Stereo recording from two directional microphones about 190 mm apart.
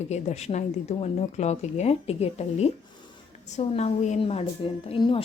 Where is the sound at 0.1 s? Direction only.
35° left (ahead or behind).